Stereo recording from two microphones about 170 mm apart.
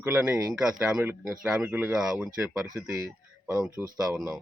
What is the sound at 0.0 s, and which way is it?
Speech, 10° right (ahead or behind).